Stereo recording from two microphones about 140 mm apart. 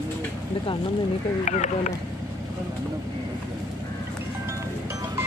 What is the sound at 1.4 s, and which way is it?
Speech, 60° left (ahead or behind).